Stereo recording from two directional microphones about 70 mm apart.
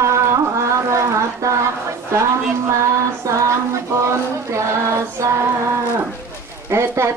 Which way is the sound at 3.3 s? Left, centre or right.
Right.